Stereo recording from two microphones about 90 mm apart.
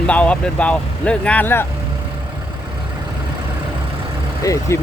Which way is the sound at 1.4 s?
25° left (ahead or behind).